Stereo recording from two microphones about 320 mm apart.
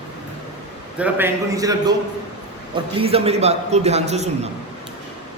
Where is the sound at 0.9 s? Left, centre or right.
Centre.